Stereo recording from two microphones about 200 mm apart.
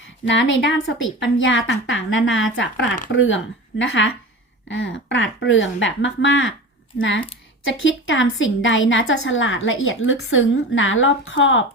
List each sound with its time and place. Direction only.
0.3 s a woman's voice: 65° left (ahead or behind)
7.6 s a woman's voice: 70° left (ahead or behind)